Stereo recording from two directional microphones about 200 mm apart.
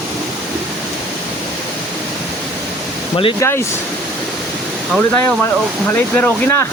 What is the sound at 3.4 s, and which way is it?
Speech, 15° left (ahead or behind).